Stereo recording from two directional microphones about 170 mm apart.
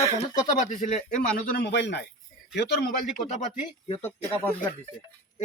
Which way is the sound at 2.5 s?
75° left (ahead or behind).